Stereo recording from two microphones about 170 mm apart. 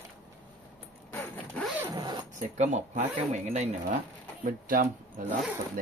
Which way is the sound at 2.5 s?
45° right (ahead or behind).